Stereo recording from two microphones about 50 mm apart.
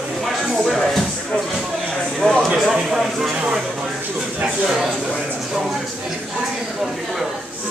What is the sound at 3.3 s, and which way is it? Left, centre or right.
Speech, centre.